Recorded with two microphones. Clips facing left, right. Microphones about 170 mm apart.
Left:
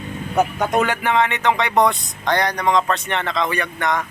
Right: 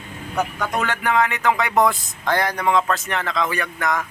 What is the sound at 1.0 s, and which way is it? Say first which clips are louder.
Speech: left 1 dB; centre (ahead or behind).